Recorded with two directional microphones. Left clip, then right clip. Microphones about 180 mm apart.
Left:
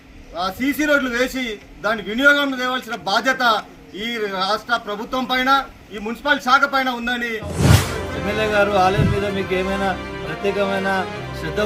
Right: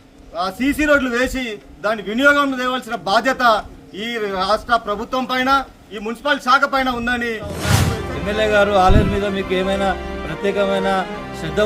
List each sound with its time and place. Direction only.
0.3 s a man's voice: 5° right (ahead or behind)